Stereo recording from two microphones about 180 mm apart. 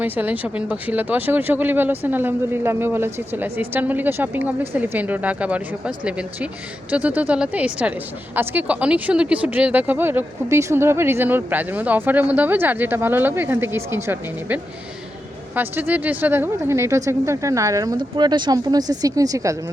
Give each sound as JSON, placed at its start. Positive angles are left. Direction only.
{"t": 0.0, "sound": "speech", "side_deg": -10}